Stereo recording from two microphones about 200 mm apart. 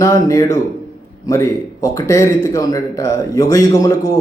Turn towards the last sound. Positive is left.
turn(degrees=15)  # may be behind; listen again after turning